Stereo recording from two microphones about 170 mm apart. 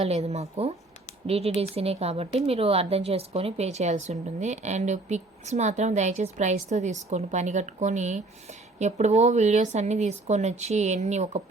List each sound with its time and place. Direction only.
0.0 s speech: 40° right (ahead or behind)